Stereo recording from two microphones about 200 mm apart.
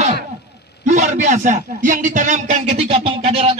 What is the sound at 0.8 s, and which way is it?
Speech, 35° right (ahead or behind).